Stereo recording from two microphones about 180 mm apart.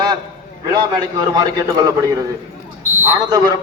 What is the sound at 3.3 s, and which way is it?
Speech, 20° right (ahead or behind).